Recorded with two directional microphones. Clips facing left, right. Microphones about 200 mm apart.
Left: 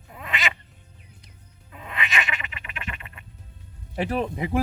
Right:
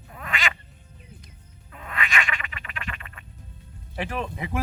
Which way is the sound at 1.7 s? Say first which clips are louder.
Right 1 dB; 20° left (ahead or behind).